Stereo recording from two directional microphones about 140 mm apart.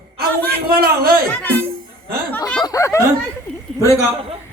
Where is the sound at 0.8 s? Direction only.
90° right.